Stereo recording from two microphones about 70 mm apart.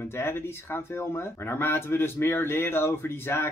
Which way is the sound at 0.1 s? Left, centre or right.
Left.